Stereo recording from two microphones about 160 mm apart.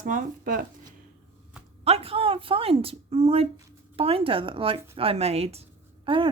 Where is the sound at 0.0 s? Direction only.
55° right (ahead or behind).